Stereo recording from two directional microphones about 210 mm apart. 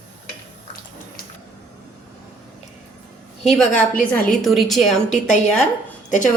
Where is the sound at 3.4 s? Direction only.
Centre (ahead or behind).